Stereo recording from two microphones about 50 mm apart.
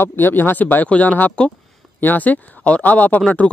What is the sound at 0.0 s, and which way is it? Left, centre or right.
Speech, left.